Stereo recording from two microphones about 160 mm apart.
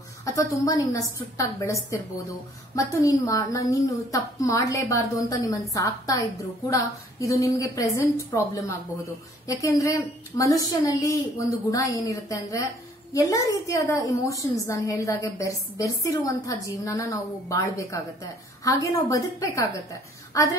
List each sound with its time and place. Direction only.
0.2 s a woman's voice: 20° left (ahead or behind)